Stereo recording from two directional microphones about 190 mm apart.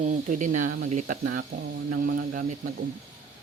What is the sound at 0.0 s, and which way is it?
Speech, 45° right (ahead or behind).